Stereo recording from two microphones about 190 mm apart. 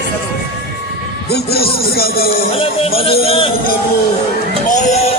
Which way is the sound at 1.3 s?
55° left (ahead or behind).